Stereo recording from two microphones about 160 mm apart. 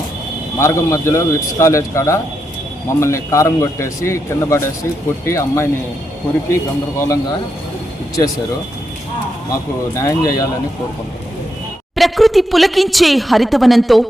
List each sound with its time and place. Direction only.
0.6 s a man's voice: 15° left (ahead or behind)
9.9 s speech: 20° left (ahead or behind)
11.9 s a woman's voice: centre (ahead or behind)